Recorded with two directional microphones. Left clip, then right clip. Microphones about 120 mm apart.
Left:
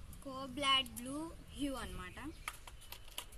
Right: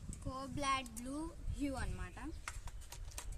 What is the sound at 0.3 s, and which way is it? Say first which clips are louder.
Speech: left 4 dB; 15° right (ahead or behind).